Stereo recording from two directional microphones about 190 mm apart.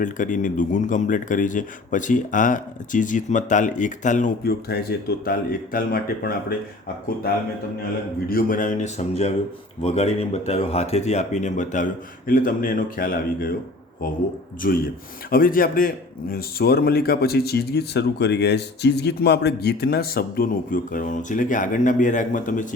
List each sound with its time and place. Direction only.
0.0 s speech: 45° left (ahead or behind)
4.4 s speech: 55° left (ahead or behind)
8.3 s speech: 50° left (ahead or behind)
15.3 s speech: 50° left (ahead or behind)